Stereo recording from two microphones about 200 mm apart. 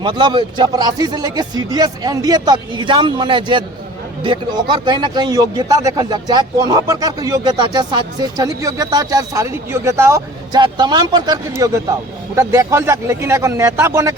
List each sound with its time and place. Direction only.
0.0 s speech: 20° right (ahead or behind)